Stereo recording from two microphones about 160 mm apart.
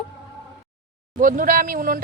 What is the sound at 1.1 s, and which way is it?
Speech, 55° right (ahead or behind).